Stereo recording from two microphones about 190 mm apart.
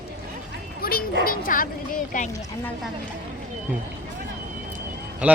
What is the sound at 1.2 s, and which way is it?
Speech, 50° left (ahead or behind).